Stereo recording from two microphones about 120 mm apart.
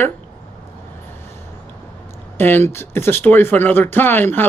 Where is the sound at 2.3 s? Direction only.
20° left (ahead or behind).